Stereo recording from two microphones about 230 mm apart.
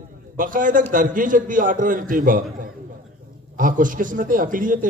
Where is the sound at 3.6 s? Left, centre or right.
Right.